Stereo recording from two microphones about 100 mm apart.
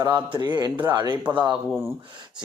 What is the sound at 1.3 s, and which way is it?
Speech, 50° right (ahead or behind).